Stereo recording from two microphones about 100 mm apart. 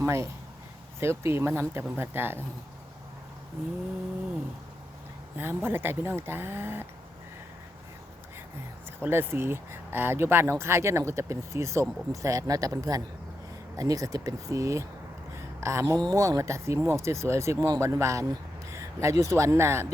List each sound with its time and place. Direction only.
0.0 s speech: 30° right (ahead or behind)
5.4 s speech: 20° right (ahead or behind)
9.0 s speech: 25° right (ahead or behind)
15.4 s a sound: 30° right (ahead or behind)
16.0 s speech: 35° right (ahead or behind)